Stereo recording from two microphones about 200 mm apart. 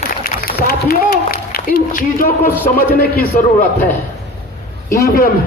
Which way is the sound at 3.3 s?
40° left (ahead or behind).